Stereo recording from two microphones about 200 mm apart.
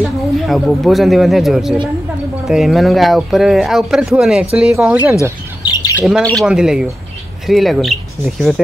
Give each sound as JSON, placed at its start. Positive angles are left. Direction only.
{"t": 0.5, "sound": "speech", "side_deg": 0}
{"t": 5.6, "sound": "bird", "side_deg": 20}
{"t": 5.9, "sound": "speech", "side_deg": -5}